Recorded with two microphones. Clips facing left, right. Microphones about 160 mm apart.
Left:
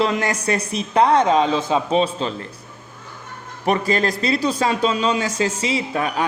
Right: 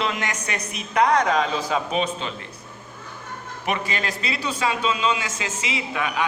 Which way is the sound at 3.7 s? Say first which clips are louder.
Left 8 dB; 40° left (ahead or behind).